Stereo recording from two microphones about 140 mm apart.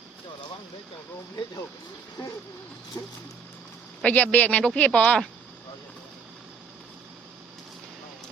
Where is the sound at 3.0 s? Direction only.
25° left (ahead or behind).